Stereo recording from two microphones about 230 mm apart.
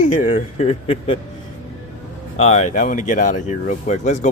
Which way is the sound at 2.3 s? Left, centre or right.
Left.